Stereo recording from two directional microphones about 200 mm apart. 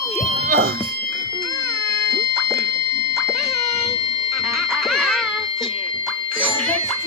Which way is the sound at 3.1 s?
Centre (ahead or behind).